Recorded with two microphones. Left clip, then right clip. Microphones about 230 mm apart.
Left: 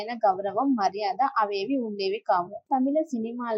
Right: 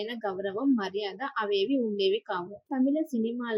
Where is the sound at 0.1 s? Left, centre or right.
Centre.